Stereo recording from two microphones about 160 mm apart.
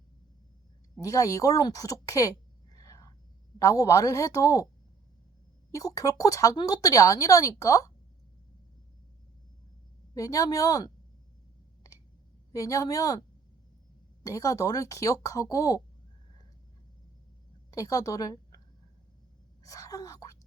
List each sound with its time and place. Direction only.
1.0 s speech: 20° left (ahead or behind)
2.7 s a sound: 20° left (ahead or behind)
3.6 s speech: 20° left (ahead or behind)
5.7 s speech: 20° left (ahead or behind)
10.2 s speech: 20° left (ahead or behind)
12.5 s speech: 20° left (ahead or behind)
14.3 s speech: 20° left (ahead or behind)
17.7 s a woman's voice: 20° left (ahead or behind)
19.6 s speech: 20° left (ahead or behind)